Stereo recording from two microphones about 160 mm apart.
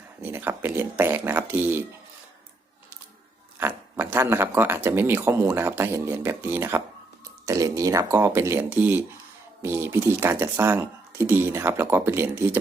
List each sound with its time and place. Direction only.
0.2 s speech: 10° right (ahead or behind)
3.6 s speech: 15° right (ahead or behind)